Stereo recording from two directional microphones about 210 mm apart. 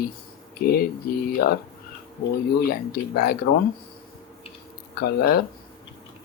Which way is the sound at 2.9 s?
45° left (ahead or behind).